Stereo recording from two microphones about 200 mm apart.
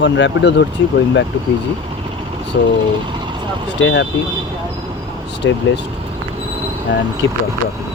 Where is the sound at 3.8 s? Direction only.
70° left (ahead or behind).